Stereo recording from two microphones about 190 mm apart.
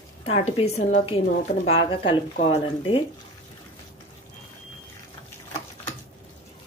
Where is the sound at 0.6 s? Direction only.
35° left (ahead or behind).